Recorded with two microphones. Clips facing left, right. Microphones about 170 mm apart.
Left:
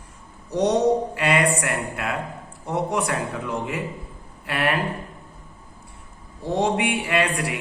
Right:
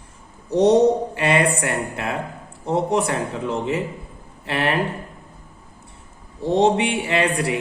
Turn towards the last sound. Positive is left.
turn(degrees=-30)  # may be behind; listen again after turning